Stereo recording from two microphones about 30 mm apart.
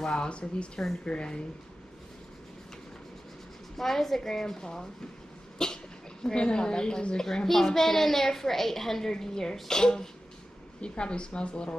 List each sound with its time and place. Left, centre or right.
0.0 s speech: left
3.7 s a child's voice: centre
5.6 s cough: left
6.3 s a child's voice: left
10.8 s speech: left